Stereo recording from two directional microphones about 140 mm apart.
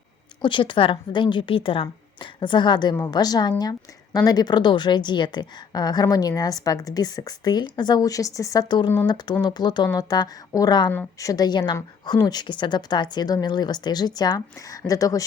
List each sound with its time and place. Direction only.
0.4 s a woman's voice: 35° left (ahead or behind)